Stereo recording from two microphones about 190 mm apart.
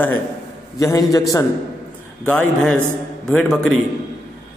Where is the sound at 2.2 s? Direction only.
5° left (ahead or behind).